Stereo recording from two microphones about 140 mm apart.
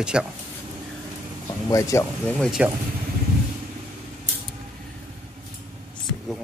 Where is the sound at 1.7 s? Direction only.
20° left (ahead or behind).